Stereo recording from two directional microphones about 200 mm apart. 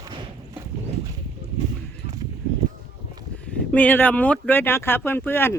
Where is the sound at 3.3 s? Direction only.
5° left (ahead or behind).